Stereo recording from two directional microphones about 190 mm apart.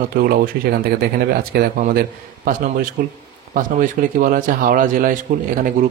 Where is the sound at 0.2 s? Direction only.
45° right (ahead or behind).